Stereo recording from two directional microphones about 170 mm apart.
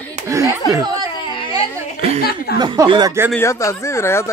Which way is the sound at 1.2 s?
30° left (ahead or behind).